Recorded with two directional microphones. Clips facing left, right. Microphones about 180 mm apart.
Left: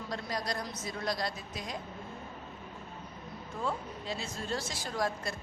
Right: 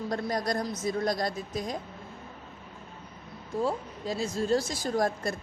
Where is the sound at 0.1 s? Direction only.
50° right (ahead or behind).